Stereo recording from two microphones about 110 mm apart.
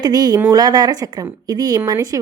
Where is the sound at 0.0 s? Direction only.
40° right (ahead or behind).